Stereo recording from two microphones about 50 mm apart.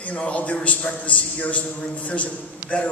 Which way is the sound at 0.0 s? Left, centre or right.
Left.